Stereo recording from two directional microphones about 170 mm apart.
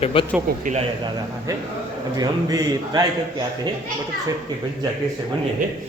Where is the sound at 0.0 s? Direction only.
35° left (ahead or behind).